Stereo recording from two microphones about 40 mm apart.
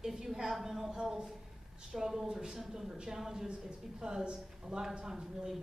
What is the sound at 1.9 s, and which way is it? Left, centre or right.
Speech, centre.